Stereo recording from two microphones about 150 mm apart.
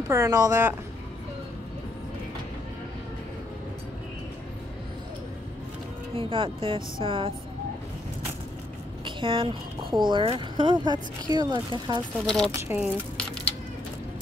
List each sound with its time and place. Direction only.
0.1 s speech: 20° right (ahead or behind)
6.1 s speech: 35° right (ahead or behind)
9.0 s speech: 35° right (ahead or behind)
12.4 s speech: 20° right (ahead or behind)
13.2 s a sound: 10° left (ahead or behind)